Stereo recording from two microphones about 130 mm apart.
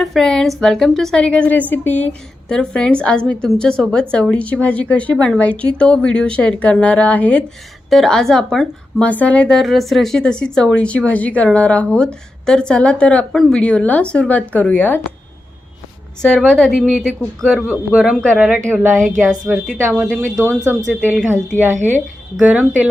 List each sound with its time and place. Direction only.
0.0 s a woman's voice: centre (ahead or behind)
16.2 s a woman's voice: 5° left (ahead or behind); by 21.2 s 10° right (ahead or behind)
22.4 s a woman's voice: 10° right (ahead or behind)